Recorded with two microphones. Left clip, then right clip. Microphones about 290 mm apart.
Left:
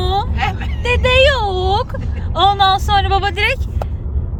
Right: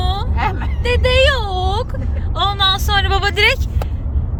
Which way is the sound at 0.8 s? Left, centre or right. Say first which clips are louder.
Left 2 dB; centre.